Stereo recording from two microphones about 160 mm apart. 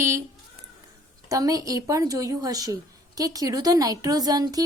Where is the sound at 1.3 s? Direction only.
20° right (ahead or behind).